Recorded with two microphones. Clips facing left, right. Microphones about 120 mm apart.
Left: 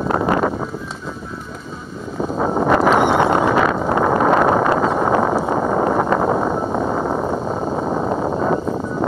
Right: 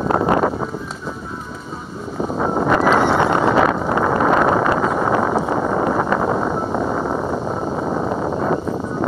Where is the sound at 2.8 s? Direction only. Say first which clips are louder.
Even; 20° left (ahead or behind).